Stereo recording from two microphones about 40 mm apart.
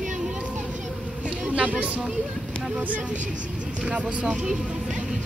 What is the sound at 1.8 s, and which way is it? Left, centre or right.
Speech, right.